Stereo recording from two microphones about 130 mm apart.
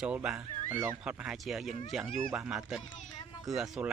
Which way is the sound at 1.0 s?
10° right (ahead or behind).